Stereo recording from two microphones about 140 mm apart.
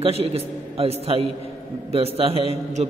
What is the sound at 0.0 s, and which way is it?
A man's voice, 45° right (ahead or behind).